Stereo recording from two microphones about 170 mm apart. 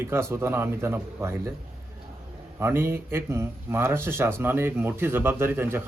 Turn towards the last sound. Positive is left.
turn(degrees=-15)  # may be behind; listen again after turning